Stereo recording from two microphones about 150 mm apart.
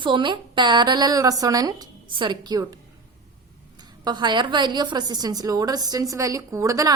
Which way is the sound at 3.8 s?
30° right (ahead or behind).